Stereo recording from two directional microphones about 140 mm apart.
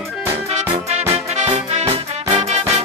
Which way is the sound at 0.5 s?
50° right (ahead or behind).